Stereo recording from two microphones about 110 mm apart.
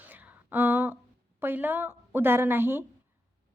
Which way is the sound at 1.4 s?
20° right (ahead or behind).